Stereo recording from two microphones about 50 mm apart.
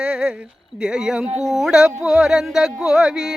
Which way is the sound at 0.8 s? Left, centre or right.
Centre.